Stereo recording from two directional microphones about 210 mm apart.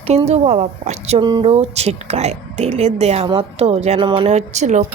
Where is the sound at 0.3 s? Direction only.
30° right (ahead or behind).